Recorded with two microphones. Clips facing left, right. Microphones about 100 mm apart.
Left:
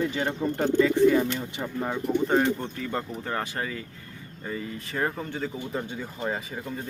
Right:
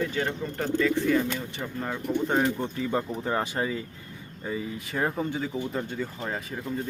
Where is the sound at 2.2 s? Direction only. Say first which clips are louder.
Left 1 dB; 5° right (ahead or behind).